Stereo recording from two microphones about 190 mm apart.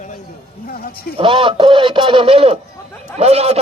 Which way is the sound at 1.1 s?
25° right (ahead or behind).